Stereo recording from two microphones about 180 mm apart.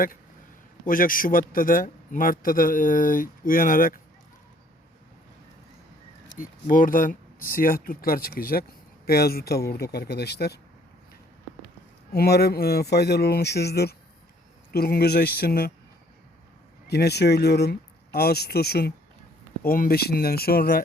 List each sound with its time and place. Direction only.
0.9 s a man's voice: 50° left (ahead or behind)
6.3 s a man's voice: 50° left (ahead or behind); by 10.6 s 65° left (ahead or behind)
12.1 s speech: 60° left (ahead or behind)
16.8 s speech: 65° left (ahead or behind)